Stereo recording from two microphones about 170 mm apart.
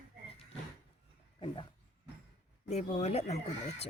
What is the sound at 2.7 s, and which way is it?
Speech, 40° left (ahead or behind).